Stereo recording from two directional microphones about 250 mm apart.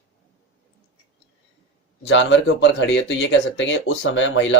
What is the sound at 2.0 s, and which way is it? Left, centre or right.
Speech, left.